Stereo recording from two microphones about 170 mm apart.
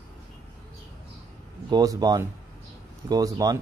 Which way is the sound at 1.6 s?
25° right (ahead or behind).